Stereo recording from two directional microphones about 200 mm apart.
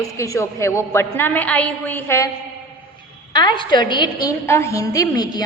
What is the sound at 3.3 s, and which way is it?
A woman's voice, 25° left (ahead or behind).